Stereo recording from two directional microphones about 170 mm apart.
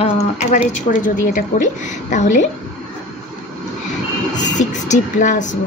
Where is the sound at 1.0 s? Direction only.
50° left (ahead or behind).